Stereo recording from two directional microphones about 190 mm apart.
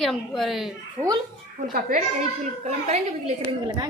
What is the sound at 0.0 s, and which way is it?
Speech, centre (ahead or behind).